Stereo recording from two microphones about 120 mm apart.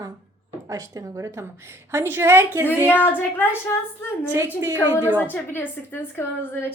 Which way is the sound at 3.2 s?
15° left (ahead or behind).